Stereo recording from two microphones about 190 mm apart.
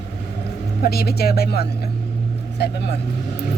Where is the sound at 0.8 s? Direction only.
55° left (ahead or behind).